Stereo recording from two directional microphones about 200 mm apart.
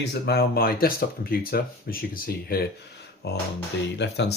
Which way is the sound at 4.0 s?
60° left (ahead or behind).